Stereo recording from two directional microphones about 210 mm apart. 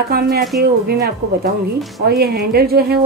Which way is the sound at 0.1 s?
45° right (ahead or behind).